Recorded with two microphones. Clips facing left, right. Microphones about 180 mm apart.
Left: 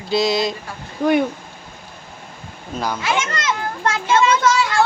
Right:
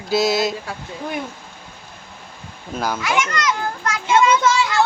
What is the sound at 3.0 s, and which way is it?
A child's voice, 25° left (ahead or behind).